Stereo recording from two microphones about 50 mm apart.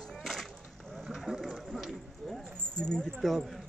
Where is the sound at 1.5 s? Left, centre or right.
Centre.